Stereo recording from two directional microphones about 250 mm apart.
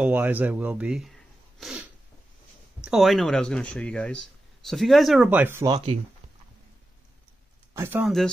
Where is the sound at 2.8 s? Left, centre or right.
Centre.